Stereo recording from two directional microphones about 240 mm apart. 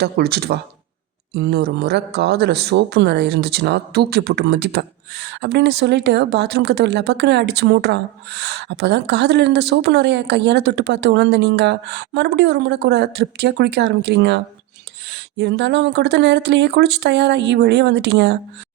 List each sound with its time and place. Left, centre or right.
0.0 s speech: right